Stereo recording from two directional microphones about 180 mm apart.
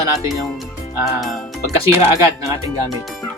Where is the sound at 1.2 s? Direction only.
Centre (ahead or behind).